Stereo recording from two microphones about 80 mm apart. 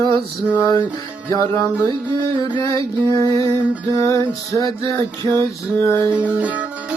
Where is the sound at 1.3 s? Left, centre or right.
Left.